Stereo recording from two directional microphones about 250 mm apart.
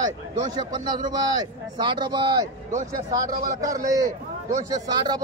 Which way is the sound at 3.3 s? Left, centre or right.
Right.